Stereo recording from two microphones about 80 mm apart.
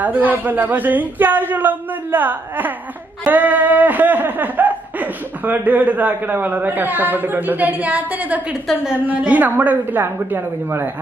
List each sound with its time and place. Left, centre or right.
0.0 s chuckle: right